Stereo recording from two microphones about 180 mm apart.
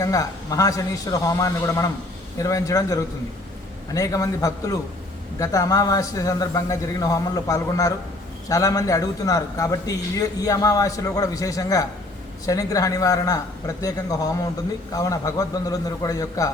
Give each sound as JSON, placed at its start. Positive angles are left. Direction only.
{"t": 0.0, "sound": "a man's voice", "side_deg": 20}